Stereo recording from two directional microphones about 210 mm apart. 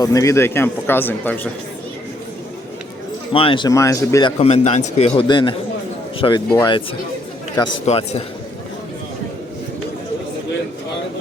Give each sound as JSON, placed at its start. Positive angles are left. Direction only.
{"t": 0.0, "sound": "speech", "side_deg": 15}
{"t": 3.3, "sound": "speech", "side_deg": 25}